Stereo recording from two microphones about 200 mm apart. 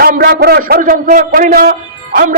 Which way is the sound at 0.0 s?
50° right (ahead or behind).